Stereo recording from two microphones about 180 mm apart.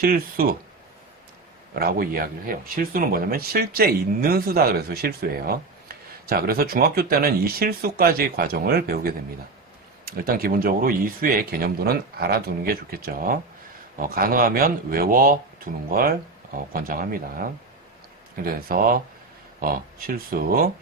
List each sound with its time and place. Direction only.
0.0 s speech: 55° right (ahead or behind)
1.7 s speech: 55° right (ahead or behind)
18.4 s speech: 55° right (ahead or behind)